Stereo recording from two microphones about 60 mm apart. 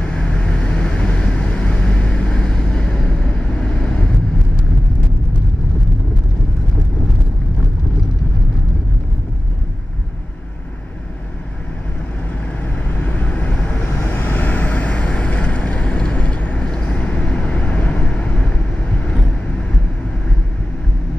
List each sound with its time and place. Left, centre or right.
0.0 s vehicle: centre
12.9 s vehicle: left
13.9 s vehicle: left